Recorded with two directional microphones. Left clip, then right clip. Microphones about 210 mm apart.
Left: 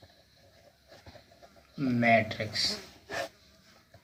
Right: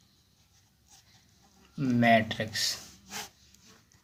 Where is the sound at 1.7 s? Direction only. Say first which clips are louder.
Right 1 dB; 40° right (ahead or behind).